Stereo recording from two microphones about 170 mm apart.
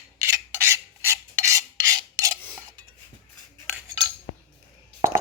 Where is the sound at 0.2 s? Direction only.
15° right (ahead or behind).